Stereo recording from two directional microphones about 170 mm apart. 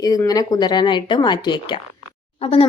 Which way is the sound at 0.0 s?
20° left (ahead or behind).